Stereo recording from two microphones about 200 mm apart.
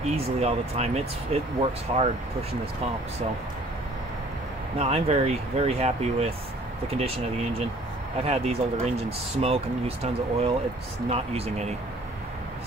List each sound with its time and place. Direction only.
0.1 s speech: 30° right (ahead or behind)
4.7 s speech: 30° right (ahead or behind)